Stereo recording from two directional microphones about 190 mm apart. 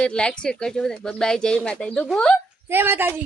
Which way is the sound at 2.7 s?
10° right (ahead or behind).